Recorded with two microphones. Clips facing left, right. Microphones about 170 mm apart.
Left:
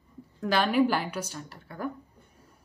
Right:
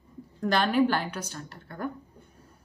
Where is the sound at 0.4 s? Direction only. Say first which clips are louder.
Even; 5° left (ahead or behind).